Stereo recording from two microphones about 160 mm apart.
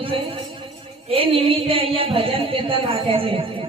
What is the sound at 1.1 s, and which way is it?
A man's voice, 35° right (ahead or behind).